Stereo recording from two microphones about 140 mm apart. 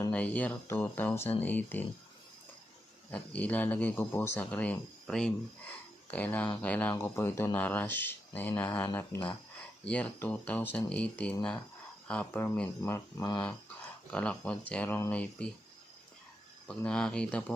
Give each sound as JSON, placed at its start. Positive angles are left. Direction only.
{"t": 0.1, "sound": "speech", "side_deg": 10}
{"t": 3.1, "sound": "speech", "side_deg": 10}
{"t": 14.1, "sound": "speech", "side_deg": 10}
{"t": 16.6, "sound": "speech", "side_deg": 5}